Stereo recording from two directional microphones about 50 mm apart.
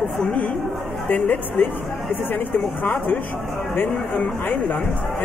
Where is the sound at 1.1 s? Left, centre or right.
Left.